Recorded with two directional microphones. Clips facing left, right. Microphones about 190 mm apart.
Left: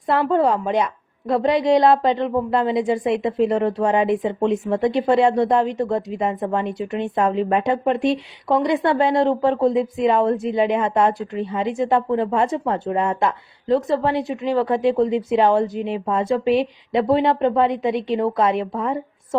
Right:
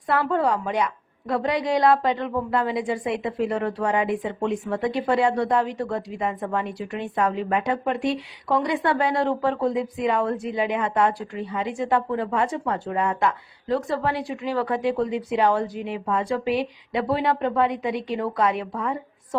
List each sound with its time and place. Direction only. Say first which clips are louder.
0.1 s speech: left 4 dB; 25° left (ahead or behind)